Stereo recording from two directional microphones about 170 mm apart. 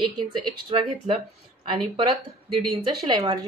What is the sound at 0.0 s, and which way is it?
Speech, 30° right (ahead or behind).